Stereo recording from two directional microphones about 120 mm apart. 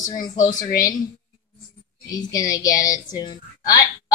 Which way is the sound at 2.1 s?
30° left (ahead or behind).